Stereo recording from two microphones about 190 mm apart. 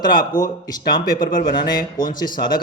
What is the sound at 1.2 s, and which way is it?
Speech, 20° left (ahead or behind).